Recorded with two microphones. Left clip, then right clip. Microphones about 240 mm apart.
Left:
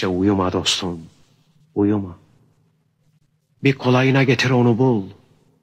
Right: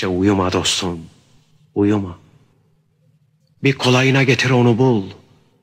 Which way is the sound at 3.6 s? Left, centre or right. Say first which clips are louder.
Right 2 dB; centre.